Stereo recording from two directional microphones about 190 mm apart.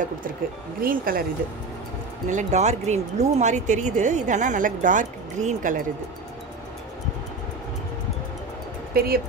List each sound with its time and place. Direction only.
0.7 s speech: 50° right (ahead or behind)
2.2 s speech: 40° right (ahead or behind)
8.9 s speech: 50° right (ahead or behind)